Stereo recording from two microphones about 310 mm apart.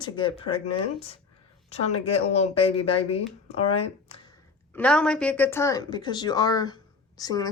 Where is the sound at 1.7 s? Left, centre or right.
Centre.